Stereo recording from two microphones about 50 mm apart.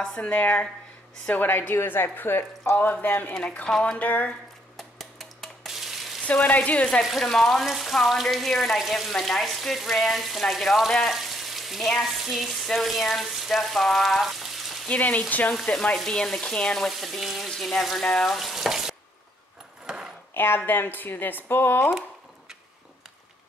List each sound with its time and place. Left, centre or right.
0.1 s a woman's voice: left
3.6 s frying: centre
4.0 s speech: left
4.7 s a sound: centre
5.7 s sizzle: centre
6.4 s a woman's voice: left
7.0 s water tap: centre
10.9 s frying: centre
11.1 s frying: centre
11.9 s water tap: centre
14.9 s speech: left
15.7 s frying: centre
16.9 s water tap: centre
20.3 s speech: left